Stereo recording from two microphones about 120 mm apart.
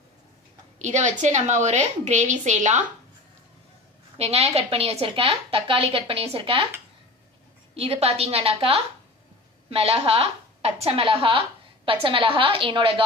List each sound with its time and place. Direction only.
0.7 s a woman's voice: 75° right (ahead or behind)
4.2 s a woman's voice: 55° right (ahead or behind)
7.7 s a woman's voice: 55° right (ahead or behind)